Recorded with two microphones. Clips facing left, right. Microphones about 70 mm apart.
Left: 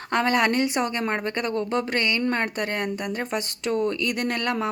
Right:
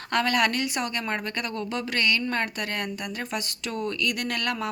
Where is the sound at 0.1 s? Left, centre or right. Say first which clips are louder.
Left 2 dB; left.